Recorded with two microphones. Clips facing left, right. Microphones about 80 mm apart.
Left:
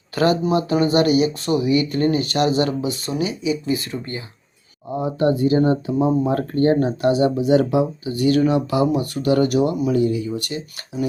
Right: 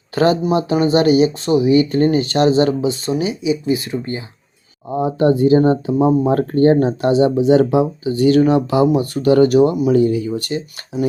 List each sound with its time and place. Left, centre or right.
0.1 s speech: right